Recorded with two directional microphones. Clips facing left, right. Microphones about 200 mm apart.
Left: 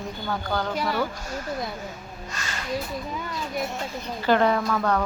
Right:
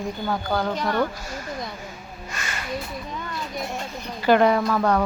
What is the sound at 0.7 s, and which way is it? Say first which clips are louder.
Speech: right 1 dB; 5° left (ahead or behind).